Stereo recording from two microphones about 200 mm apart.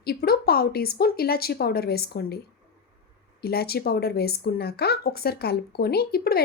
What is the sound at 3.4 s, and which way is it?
A woman's voice, 50° left (ahead or behind).